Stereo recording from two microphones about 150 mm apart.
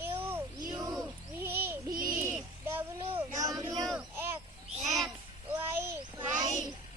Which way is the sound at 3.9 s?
15° right (ahead or behind).